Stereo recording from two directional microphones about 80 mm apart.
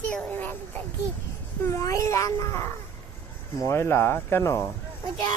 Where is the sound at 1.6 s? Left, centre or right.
Left.